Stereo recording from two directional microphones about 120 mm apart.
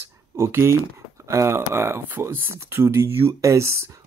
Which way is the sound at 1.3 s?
25° right (ahead or behind).